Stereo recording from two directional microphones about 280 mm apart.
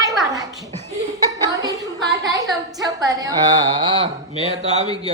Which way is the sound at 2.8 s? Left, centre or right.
Centre.